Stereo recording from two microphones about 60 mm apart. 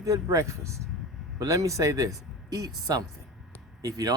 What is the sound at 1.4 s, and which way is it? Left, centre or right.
Speech, right.